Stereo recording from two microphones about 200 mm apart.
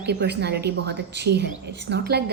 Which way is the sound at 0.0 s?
55° right (ahead or behind).